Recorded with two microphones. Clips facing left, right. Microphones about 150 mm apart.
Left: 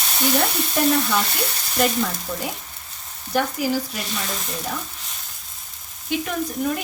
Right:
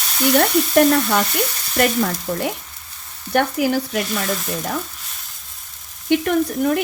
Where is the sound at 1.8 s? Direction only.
60° right (ahead or behind).